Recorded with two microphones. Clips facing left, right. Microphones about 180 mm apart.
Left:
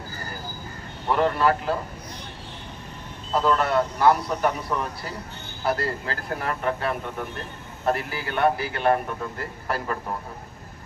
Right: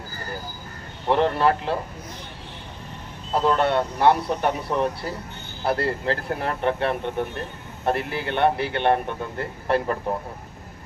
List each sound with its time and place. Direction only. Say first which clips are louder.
1.1 s speech: right 1 dB; 30° right (ahead or behind)
3.3 s speech: right 1 dB; 30° right (ahead or behind)